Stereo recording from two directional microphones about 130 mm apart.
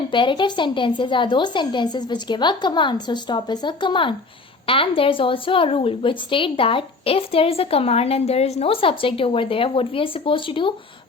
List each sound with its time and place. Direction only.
0.1 s a woman's voice: 40° left (ahead or behind)